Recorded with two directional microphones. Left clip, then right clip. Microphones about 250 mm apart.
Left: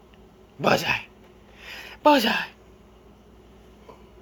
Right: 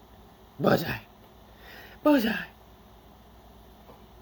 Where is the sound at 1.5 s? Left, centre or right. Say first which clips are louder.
Left 8 dB; centre.